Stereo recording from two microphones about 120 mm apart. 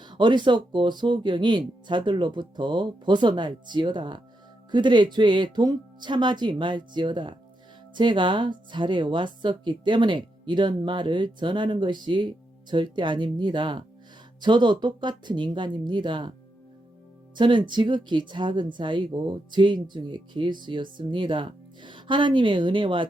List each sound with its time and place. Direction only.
0.0 s speech: 40° right (ahead or behind)
17.3 s speech: 40° right (ahead or behind)